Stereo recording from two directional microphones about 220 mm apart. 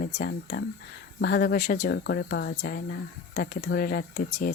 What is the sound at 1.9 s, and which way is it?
Speech, 50° left (ahead or behind).